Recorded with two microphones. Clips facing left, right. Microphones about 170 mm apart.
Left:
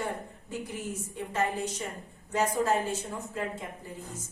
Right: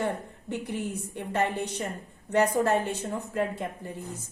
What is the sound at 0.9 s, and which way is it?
A woman's voice, 65° right (ahead or behind).